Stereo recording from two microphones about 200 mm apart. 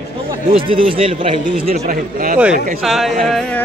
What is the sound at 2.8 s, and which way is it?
Speech, centre (ahead or behind).